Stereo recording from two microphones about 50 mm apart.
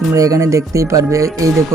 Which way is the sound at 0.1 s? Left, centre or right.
Right.